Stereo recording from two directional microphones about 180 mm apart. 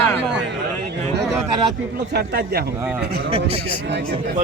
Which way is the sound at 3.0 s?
60° right (ahead or behind).